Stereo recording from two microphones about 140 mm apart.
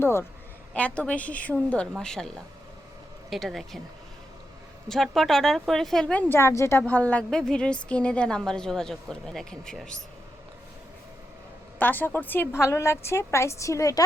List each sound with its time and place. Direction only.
0.0 s a woman's voice: 15° left (ahead or behind); by 3.8 s centre (ahead or behind)
4.9 s a woman's voice: centre (ahead or behind)
11.8 s a woman's voice: 10° left (ahead or behind)